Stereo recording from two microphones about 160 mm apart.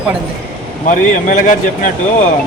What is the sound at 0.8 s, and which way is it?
A man's voice, 55° left (ahead or behind).